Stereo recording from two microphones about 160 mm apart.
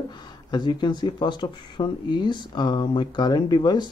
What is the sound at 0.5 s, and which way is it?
Speech, 30° left (ahead or behind).